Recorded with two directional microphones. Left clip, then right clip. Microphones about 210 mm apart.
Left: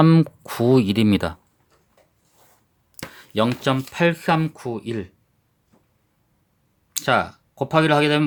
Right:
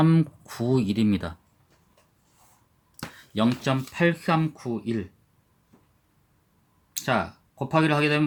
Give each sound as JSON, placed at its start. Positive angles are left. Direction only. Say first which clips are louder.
{"t": 0.0, "sound": "speech", "louder": "left 6 dB", "side_deg": 40}
{"t": 3.2, "sound": "speech", "louder": "left 5 dB", "side_deg": 45}
{"t": 6.9, "sound": "speech", "louder": "left 6 dB", "side_deg": 45}